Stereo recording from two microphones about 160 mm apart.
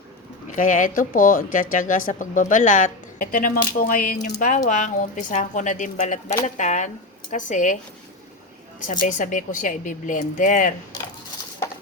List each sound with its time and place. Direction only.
0.5 s a woman's voice: 55° left (ahead or behind)
8.9 s a woman's voice: 50° left (ahead or behind)